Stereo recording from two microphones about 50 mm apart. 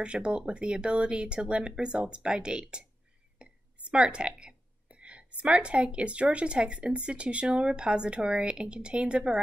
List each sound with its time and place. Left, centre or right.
0.0 s a woman's voice: right